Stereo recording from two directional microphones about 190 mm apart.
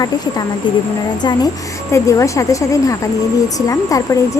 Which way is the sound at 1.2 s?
20° left (ahead or behind).